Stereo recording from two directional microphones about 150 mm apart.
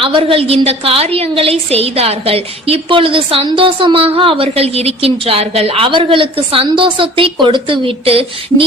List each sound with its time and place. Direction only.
0.0 s a woman's voice: 35° right (ahead or behind)